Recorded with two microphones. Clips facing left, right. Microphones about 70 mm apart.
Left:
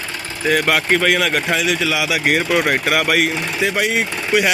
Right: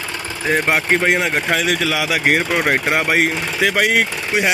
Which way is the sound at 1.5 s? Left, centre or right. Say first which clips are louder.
Even; right.